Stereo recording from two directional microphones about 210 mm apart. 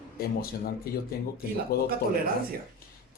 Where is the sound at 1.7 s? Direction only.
45° left (ahead or behind).